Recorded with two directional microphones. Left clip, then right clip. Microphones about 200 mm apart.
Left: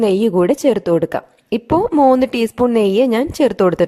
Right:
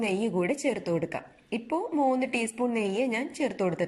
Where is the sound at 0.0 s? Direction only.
40° left (ahead or behind).